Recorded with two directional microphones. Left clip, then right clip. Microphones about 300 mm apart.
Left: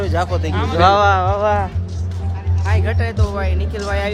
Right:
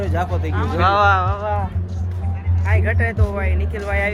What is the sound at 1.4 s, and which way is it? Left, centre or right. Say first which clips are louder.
Speech: left 7 dB; left.